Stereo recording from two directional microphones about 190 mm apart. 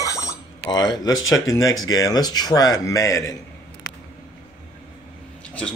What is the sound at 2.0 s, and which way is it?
Speech, 20° left (ahead or behind).